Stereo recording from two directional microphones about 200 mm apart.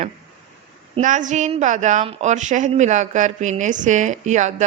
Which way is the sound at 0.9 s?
40° right (ahead or behind).